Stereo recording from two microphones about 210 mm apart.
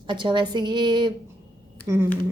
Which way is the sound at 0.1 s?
25° right (ahead or behind).